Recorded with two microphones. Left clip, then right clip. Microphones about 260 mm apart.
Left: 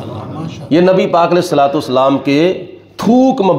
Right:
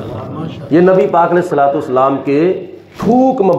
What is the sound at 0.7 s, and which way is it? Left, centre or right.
A man's voice, left.